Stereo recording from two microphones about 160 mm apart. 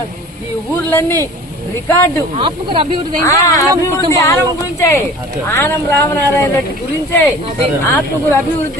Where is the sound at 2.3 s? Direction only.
35° right (ahead or behind).